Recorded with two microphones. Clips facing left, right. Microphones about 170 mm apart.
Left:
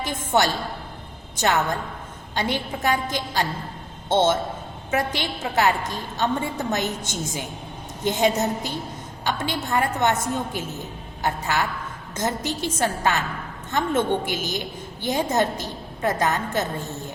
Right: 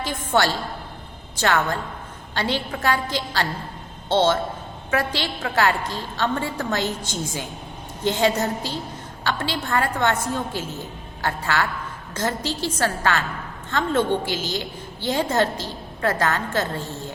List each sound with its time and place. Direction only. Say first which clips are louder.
0.0 s a woman's voice: even; 20° left (ahead or behind)